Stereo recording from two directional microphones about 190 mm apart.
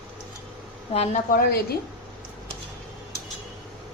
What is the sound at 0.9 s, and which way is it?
Speech, 35° left (ahead or behind).